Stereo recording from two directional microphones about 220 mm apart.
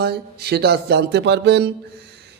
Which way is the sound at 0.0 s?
45° right (ahead or behind).